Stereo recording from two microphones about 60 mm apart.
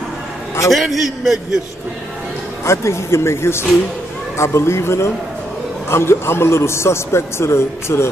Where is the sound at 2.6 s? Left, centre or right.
Left.